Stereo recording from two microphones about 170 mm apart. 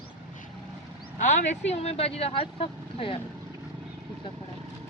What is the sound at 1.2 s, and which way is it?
Speech, 45° left (ahead or behind).